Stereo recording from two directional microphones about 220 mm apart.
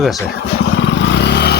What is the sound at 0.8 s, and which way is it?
Vehicle, 55° left (ahead or behind).